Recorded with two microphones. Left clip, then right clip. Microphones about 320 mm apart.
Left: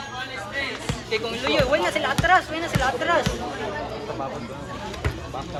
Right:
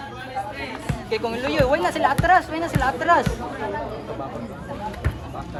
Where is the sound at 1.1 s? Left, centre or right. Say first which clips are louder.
Even; right.